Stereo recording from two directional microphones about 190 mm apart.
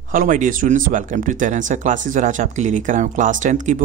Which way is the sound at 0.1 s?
45° right (ahead or behind).